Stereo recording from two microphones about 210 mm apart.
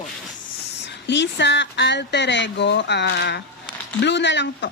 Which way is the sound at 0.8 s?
55° left (ahead or behind).